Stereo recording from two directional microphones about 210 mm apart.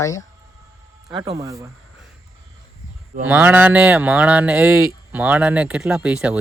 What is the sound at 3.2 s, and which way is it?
Speech, 10° right (ahead or behind).